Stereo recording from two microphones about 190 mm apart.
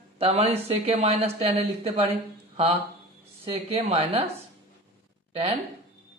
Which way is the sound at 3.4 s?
30° right (ahead or behind).